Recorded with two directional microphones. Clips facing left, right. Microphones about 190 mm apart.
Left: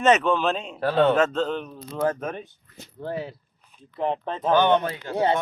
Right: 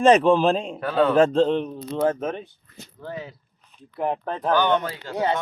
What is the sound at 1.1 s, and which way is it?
A man's voice, 30° right (ahead or behind).